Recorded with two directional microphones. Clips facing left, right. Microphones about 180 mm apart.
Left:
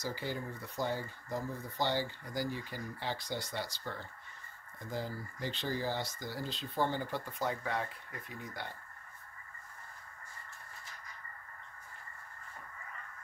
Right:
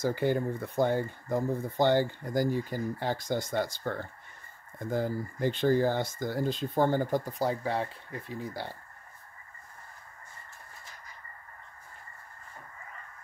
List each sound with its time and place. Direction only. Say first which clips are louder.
0.0 s speech: right 11 dB; 55° right (ahead or behind); by 8.7 s 30° right (ahead or behind)